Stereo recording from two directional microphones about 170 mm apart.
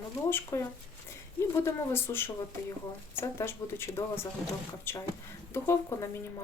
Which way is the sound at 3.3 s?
15° left (ahead or behind).